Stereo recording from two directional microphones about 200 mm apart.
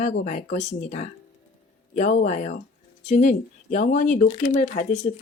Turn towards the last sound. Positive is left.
turn(degrees=40)  # may be behind; listen again after turning